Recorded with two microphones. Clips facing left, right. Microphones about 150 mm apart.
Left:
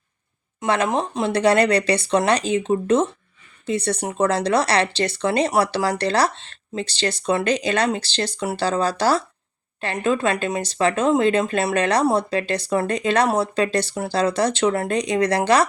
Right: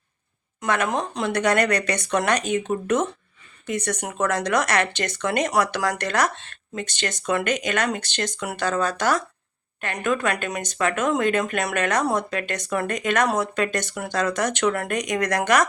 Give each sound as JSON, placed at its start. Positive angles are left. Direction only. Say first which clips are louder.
{"t": 0.6, "sound": "speech", "louder": "left 3 dB", "side_deg": 25}